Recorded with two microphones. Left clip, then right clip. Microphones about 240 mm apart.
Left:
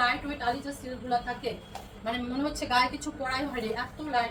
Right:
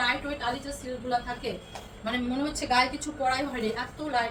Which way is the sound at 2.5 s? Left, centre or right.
Centre.